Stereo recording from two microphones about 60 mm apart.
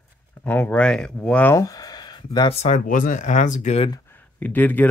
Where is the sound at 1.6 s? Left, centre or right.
Left.